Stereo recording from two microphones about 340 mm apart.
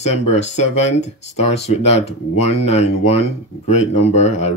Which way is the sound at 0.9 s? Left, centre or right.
Centre.